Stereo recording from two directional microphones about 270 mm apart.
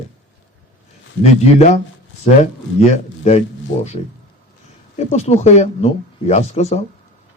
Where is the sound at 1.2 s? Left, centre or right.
Left.